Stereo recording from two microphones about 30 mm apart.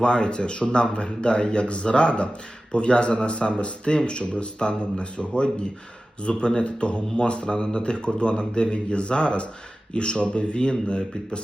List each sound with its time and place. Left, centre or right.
0.0 s a man's voice: left